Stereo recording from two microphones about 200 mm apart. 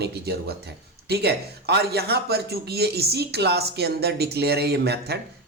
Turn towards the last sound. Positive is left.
turn(degrees=-55)  # may be behind; listen again after turning